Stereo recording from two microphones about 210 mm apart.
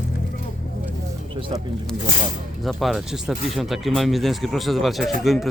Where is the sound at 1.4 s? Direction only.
25° right (ahead or behind).